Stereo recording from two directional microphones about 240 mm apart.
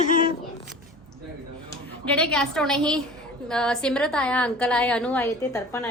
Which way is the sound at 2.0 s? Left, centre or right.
Centre.